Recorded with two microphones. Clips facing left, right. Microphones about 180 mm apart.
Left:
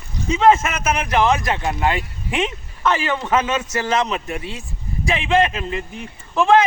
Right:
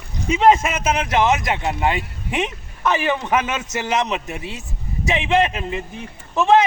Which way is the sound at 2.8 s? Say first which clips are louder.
Even; 15° right (ahead or behind).